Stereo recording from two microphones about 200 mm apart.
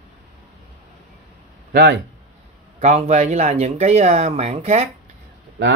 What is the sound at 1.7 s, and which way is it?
Speech, 50° right (ahead or behind).